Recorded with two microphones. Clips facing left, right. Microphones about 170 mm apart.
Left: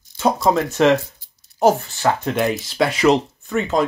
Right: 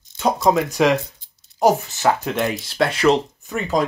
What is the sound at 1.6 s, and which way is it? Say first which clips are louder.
Speech: left 1 dB; 20° right (ahead or behind).